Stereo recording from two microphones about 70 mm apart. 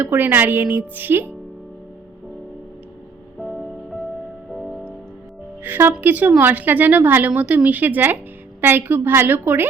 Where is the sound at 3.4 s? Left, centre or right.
Centre.